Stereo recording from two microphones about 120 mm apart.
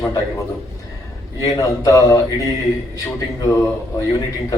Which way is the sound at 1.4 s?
30° left (ahead or behind).